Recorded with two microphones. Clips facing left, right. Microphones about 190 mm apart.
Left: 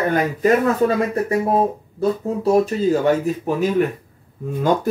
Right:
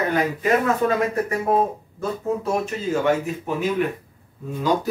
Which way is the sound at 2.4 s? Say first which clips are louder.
Left 8 dB; 35° left (ahead or behind).